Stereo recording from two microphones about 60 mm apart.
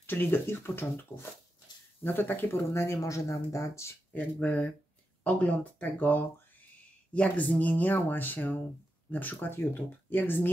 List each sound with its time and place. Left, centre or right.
0.0 s speech: left
4.1 s speech: left